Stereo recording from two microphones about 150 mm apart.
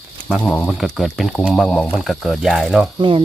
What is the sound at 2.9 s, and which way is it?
Speech, 35° right (ahead or behind).